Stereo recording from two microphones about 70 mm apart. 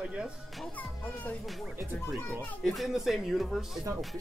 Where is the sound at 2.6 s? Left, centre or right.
Centre.